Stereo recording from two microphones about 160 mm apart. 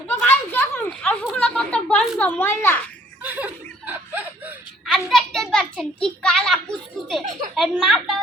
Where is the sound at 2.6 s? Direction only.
15° left (ahead or behind).